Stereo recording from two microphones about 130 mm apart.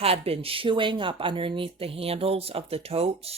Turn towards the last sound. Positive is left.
turn(degrees=-50)  # may be behind; listen again after turning